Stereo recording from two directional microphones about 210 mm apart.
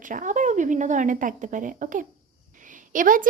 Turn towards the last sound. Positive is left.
turn(degrees=-40)  # may be behind; listen again after turning